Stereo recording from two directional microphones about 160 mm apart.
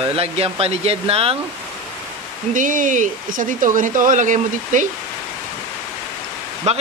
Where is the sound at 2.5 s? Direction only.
55° right (ahead or behind).